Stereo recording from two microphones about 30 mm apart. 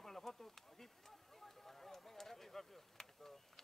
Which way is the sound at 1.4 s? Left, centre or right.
Centre.